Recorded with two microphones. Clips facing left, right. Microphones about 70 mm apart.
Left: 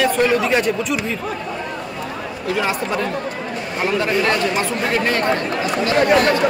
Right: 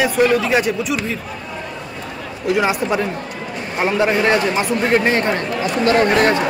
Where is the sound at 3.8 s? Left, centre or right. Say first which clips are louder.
Right 3 dB; right.